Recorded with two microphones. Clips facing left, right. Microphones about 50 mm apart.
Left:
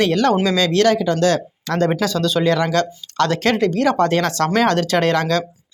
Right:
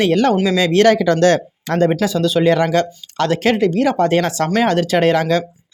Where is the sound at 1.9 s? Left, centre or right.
Centre.